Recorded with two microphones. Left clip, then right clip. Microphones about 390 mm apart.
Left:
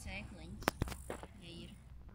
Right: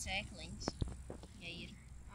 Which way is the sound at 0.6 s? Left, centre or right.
Left.